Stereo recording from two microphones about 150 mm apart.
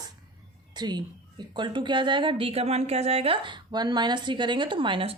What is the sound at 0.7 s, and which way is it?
A woman's voice, 25° right (ahead or behind).